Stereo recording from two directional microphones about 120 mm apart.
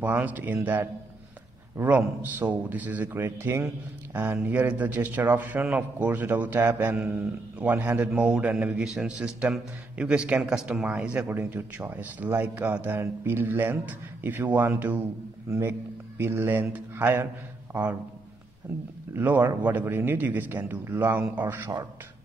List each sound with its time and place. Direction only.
0.0 s a man's voice: 15° right (ahead or behind)
1.8 s a man's voice: 15° right (ahead or behind)
15.4 s a man's voice: 25° right (ahead or behind)
19.1 s a man's voice: 15° right (ahead or behind)